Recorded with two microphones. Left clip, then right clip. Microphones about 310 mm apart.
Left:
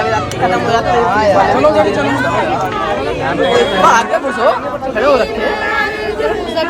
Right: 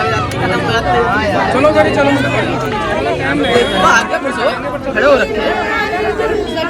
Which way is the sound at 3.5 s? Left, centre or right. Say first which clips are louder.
Left 1 dB; left.